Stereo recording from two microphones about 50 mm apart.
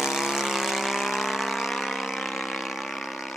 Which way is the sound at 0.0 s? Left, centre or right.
Centre.